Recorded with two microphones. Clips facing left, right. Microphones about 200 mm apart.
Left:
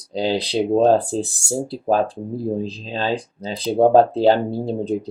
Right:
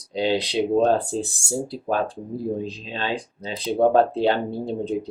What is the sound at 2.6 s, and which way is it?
Speech, 35° left (ahead or behind).